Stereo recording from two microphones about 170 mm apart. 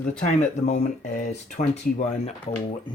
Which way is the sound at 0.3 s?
45° left (ahead or behind).